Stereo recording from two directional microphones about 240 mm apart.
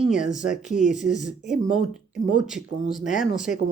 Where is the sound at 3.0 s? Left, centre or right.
Left.